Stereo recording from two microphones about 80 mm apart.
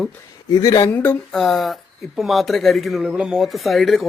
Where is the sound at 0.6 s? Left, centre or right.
Left.